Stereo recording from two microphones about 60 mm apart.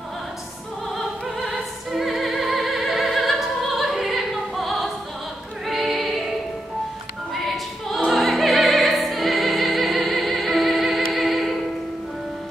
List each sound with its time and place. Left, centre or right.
0.9 s opera: centre
5.7 s music: centre
7.3 s music: centre
8.1 s opera: centre
11.1 s music: centre